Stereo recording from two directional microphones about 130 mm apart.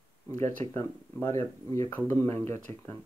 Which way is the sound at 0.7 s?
20° left (ahead or behind).